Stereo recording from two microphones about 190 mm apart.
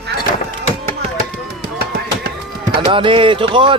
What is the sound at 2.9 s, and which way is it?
Speech, 25° right (ahead or behind).